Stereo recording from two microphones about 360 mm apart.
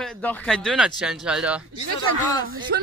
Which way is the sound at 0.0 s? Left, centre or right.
Centre.